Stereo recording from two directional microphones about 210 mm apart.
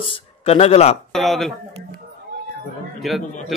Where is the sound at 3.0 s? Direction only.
Centre (ahead or behind).